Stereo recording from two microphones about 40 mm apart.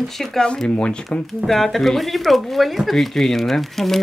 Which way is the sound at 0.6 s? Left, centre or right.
Left.